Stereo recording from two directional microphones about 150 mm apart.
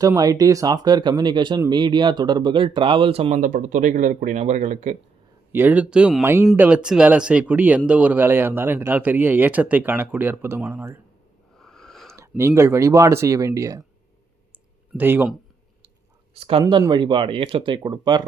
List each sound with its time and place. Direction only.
0.2 s speech: 25° right (ahead or behind); by 3.4 s 40° right (ahead or behind)
3.4 s speech: 60° right (ahead or behind)
5.5 s speech: 15° right (ahead or behind)
11.5 s a sound: 5° left (ahead or behind)
12.4 s speech: 15° right (ahead or behind)
14.9 s speech: 15° right (ahead or behind)
16.3 s speech: 40° right (ahead or behind)